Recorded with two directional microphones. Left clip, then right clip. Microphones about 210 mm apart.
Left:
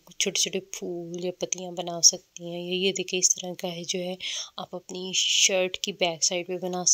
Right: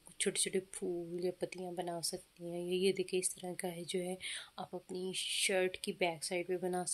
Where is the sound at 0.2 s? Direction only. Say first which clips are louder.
Left 10 dB; 25° left (ahead or behind).